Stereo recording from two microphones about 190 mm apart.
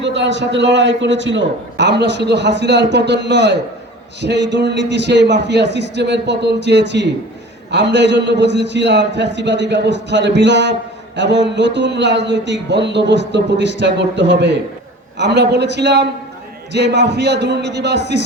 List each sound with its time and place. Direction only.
0.0 s a man's voice: 70° right (ahead or behind)